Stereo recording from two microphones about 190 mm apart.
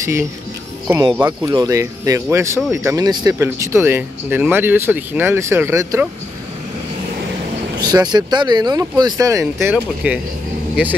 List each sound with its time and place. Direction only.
0.0 s speech: 15° right (ahead or behind)
7.8 s speech: 20° right (ahead or behind)